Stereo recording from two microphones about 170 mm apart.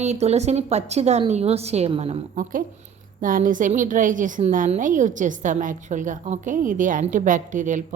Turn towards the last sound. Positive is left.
turn(degrees=-50)  # may be behind; listen again after turning